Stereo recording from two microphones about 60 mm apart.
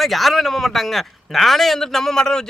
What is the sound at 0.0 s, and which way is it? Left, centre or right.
Speech, centre.